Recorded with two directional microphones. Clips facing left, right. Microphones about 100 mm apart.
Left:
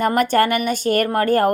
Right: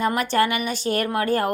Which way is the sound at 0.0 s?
50° left (ahead or behind).